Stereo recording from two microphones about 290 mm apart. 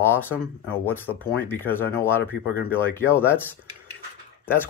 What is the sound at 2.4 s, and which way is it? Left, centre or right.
Speech, left.